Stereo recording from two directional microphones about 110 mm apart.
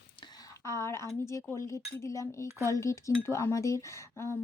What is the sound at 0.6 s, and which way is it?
Speech, 25° left (ahead or behind).